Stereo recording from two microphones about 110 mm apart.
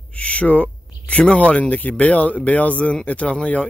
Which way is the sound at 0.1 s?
10° left (ahead or behind).